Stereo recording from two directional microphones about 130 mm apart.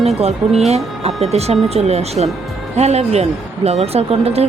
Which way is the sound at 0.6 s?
55° right (ahead or behind).